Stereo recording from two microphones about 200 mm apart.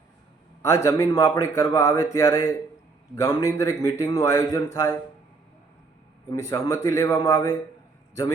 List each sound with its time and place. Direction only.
0.6 s a man's voice: 15° left (ahead or behind)
6.3 s a man's voice: 15° left (ahead or behind)